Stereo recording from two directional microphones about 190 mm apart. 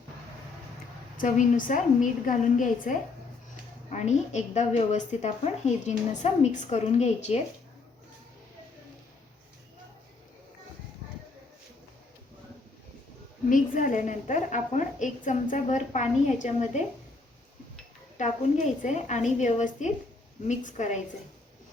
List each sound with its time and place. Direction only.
1.1 s a woman's voice: 45° left (ahead or behind)
13.5 s a woman's voice: 45° left (ahead or behind)
18.2 s a woman's voice: 40° left (ahead or behind)